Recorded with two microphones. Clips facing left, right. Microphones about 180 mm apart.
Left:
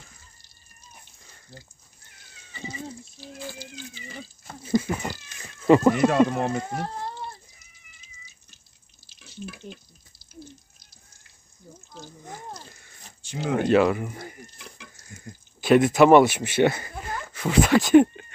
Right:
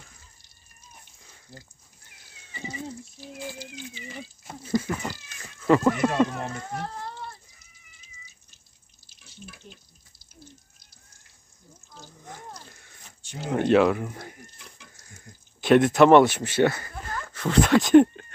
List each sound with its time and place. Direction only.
4.6 s cat: 15° left (ahead or behind)
6.0 s speech: 90° left
9.0 s drip: 90° left
12.3 s a sound: centre (ahead or behind)
13.2 s speech: 90° left
13.6 s speech: centre (ahead or behind)
15.3 s a sound: 90° left
15.6 s speech: 5° left (ahead or behind)